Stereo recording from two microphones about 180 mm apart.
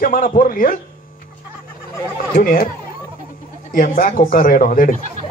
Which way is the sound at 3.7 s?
50° left (ahead or behind).